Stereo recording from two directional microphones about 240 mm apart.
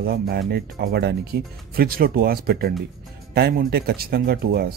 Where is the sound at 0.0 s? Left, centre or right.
Right.